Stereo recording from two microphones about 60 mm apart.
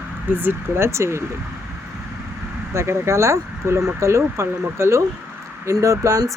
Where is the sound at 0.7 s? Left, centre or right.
Right.